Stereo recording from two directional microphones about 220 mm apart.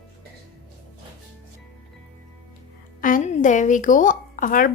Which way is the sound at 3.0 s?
40° left (ahead or behind).